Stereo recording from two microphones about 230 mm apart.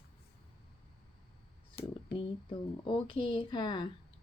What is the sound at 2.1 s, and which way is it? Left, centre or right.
Speech, left.